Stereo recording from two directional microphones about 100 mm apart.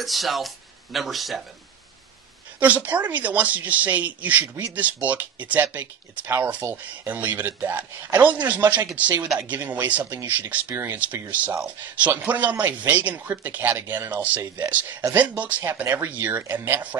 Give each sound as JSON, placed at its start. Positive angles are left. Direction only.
{"t": 0.0, "sound": "a man's voice", "side_deg": 0}
{"t": 2.6, "sound": "speech", "side_deg": -15}